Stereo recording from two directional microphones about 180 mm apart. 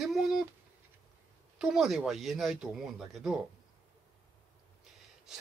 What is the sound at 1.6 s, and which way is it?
Speech, 5° right (ahead or behind).